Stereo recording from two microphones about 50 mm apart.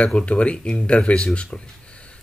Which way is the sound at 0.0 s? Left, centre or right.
Left.